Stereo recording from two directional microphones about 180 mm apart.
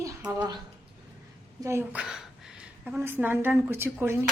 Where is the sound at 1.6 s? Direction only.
10° right (ahead or behind).